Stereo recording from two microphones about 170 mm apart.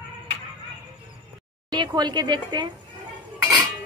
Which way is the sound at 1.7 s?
25° right (ahead or behind).